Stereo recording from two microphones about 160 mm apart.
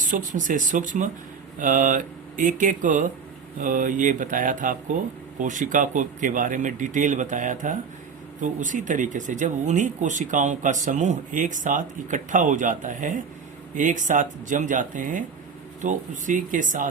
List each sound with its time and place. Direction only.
0.0 s speech: 55° right (ahead or behind)
3.6 s mantra: 55° right (ahead or behind)
5.4 s speech: 55° right (ahead or behind)